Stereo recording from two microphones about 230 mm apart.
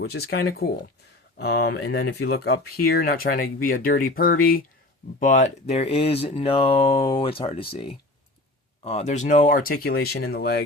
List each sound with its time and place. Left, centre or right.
0.0 s speech: left
8.8 s speech: left